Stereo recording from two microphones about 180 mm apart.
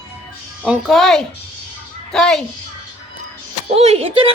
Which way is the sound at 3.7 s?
35° right (ahead or behind).